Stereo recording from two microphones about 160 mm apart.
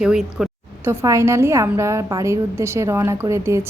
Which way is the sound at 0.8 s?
20° right (ahead or behind).